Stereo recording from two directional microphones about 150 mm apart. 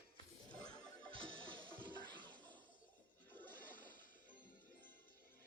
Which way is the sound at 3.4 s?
10° left (ahead or behind).